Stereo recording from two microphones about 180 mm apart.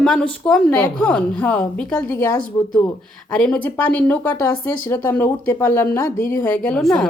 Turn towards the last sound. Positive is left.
turn(degrees=0)  # may be behind; listen again after turning